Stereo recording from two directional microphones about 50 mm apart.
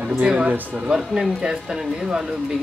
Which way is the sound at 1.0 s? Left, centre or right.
Centre.